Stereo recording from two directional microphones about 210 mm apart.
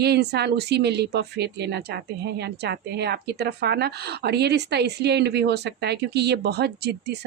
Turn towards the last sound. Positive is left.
turn(degrees=-50)  # may be behind; listen again after turning